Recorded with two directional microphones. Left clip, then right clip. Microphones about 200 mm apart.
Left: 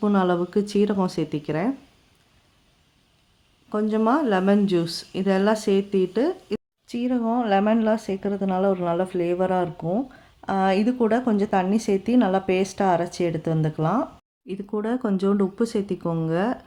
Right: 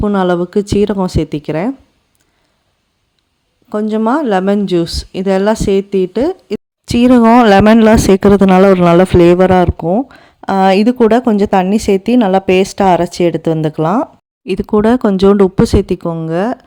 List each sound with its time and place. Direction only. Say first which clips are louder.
0.0 s a woman's voice: right 9 dB; 35° right (ahead or behind)
3.7 s a woman's voice: right 8 dB; 35° right (ahead or behind)
6.8 s a woman's voice: right 18 dB; 55° right (ahead or behind); by 16.6 s 35° right (ahead or behind)